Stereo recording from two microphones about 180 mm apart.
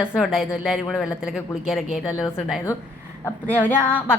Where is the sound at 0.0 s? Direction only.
5° right (ahead or behind).